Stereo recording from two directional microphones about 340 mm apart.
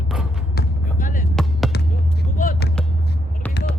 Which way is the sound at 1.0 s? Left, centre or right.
Left.